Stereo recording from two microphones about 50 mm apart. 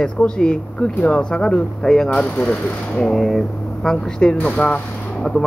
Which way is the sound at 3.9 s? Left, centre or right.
Centre.